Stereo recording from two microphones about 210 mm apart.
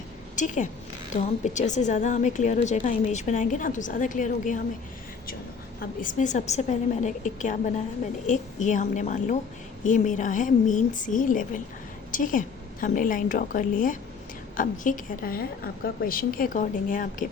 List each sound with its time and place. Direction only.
0.3 s a woman's voice: 35° left (ahead or behind)
5.8 s a woman's voice: 40° left (ahead or behind)